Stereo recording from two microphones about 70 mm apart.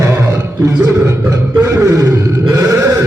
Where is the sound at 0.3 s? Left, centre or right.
Right.